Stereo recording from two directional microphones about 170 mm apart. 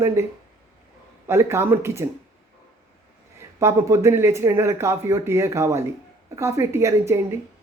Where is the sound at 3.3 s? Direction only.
15° right (ahead or behind).